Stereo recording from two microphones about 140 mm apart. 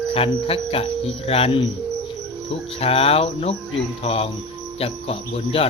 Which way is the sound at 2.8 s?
45° left (ahead or behind).